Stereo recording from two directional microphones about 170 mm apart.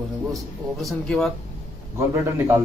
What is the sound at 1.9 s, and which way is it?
Speech, 15° right (ahead or behind).